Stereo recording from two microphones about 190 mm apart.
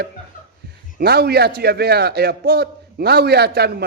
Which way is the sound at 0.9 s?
55° right (ahead or behind).